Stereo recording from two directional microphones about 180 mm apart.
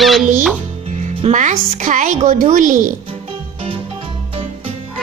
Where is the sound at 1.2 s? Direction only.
40° right (ahead or behind).